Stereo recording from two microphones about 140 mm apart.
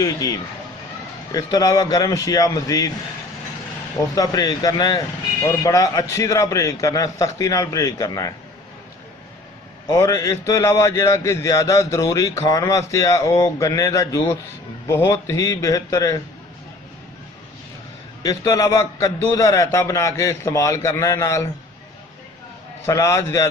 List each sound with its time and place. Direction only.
0.0 s a man's voice: 25° left (ahead or behind)
4.1 s a man's voice: 25° left (ahead or behind)
9.8 s a man's voice: 20° left (ahead or behind)
18.2 s a man's voice: 25° left (ahead or behind)
22.8 s a man's voice: 20° left (ahead or behind)